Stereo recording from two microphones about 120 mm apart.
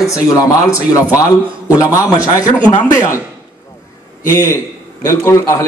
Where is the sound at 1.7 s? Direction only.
30° left (ahead or behind).